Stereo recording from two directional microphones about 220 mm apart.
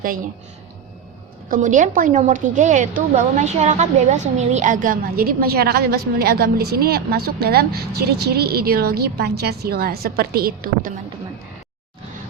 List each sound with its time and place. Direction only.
1.5 s a woman's voice: 35° right (ahead or behind)